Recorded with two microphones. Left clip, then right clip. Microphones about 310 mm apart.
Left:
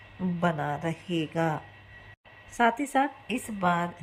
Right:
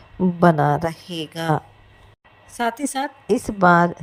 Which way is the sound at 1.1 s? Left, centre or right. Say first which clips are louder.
Right 1 dB; centre.